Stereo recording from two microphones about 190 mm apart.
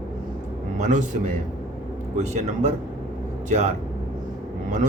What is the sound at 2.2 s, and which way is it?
Speech, 35° right (ahead or behind).